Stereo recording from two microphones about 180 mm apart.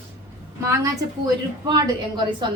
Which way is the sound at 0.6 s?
20° right (ahead or behind).